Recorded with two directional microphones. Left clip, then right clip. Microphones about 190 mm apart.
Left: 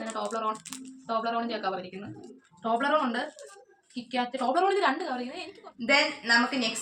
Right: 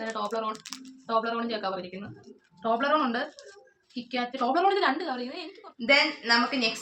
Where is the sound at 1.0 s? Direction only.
25° right (ahead or behind).